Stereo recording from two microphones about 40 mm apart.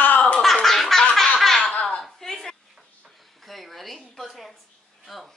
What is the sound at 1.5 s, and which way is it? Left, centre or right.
Laughter, centre.